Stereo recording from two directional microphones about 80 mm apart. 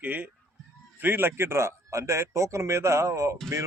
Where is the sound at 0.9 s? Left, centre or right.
Right.